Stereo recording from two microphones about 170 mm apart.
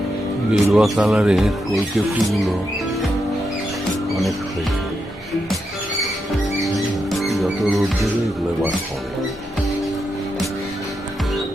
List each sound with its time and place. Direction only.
0.5 s speech: centre (ahead or behind)
4.1 s music: centre (ahead or behind)
6.7 s music: centre (ahead or behind)